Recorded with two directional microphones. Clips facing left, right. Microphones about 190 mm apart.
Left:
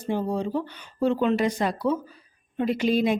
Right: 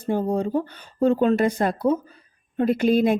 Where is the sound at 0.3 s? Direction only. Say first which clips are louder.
Right 4 dB; 50° right (ahead or behind).